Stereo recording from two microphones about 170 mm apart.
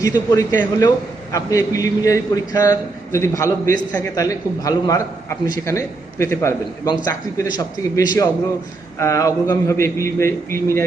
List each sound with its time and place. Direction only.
0.0 s a man's voice: 20° left (ahead or behind)